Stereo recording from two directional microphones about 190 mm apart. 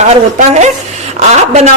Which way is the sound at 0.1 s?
35° right (ahead or behind).